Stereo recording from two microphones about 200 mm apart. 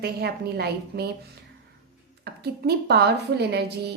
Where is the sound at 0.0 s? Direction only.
55° right (ahead or behind).